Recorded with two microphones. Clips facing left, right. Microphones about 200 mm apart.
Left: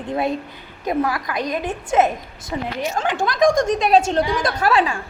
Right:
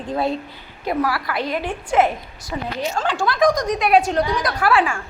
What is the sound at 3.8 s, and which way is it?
A woman's voice, 25° left (ahead or behind).